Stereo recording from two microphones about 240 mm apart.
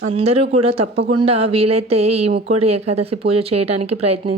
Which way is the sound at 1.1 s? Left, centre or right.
Right.